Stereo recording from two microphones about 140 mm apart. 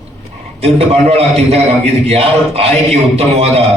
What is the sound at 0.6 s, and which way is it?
A man's voice, 45° right (ahead or behind).